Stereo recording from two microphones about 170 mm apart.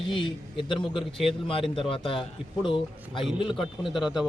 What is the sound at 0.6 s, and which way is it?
A man's voice, 30° left (ahead or behind).